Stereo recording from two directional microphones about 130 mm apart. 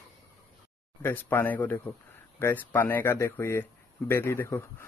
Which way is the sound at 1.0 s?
15° left (ahead or behind).